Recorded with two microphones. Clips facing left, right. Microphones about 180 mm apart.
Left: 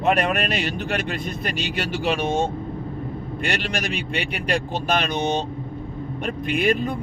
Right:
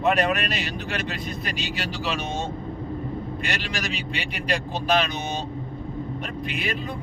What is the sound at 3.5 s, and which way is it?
Speech, 55° left (ahead or behind).